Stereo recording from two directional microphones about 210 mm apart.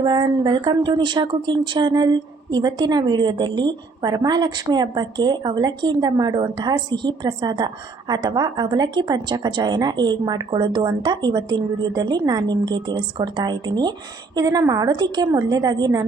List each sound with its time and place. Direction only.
0.0 s a woman's voice: 20° right (ahead or behind)